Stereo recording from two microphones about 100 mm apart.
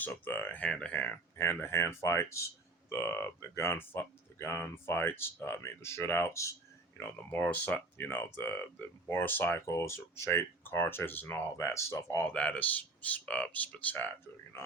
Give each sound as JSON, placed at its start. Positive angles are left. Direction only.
{"t": 0.1, "sound": "speech", "side_deg": 20}
{"t": 6.9, "sound": "speech", "side_deg": 15}
{"t": 11.5, "sound": "speech", "side_deg": 30}
{"t": 12.3, "sound": "speech", "side_deg": 15}